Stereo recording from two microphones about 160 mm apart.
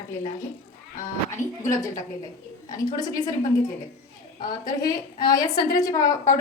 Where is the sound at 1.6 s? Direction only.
20° left (ahead or behind).